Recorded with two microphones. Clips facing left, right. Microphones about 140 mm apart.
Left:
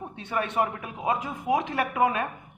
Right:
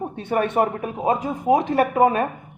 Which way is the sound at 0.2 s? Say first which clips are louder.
Right 6 dB; 50° right (ahead or behind).